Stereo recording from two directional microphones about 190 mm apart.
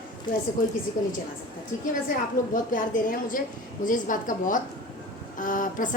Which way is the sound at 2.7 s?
45° left (ahead or behind).